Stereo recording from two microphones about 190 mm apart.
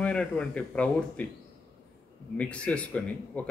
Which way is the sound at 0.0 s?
5° left (ahead or behind).